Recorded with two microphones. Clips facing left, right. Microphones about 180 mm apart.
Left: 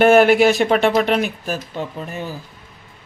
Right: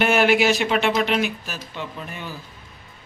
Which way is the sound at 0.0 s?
45° left (ahead or behind).